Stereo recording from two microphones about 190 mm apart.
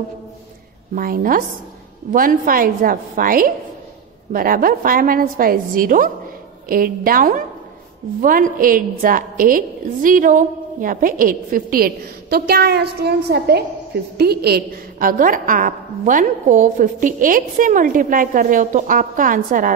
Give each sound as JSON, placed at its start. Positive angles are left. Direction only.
{"t": 0.9, "sound": "a woman's voice", "side_deg": -50}